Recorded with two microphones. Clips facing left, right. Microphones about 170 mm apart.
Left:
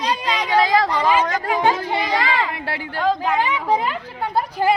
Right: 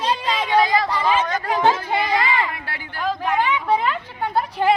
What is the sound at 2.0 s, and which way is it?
Speech, 90° left.